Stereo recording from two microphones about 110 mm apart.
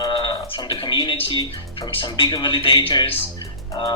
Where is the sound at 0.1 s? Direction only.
50° left (ahead or behind).